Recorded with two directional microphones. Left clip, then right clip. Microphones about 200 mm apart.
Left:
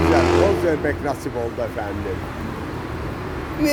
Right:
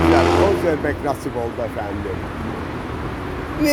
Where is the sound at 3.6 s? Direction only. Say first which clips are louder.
Right 2 dB; 10° right (ahead or behind).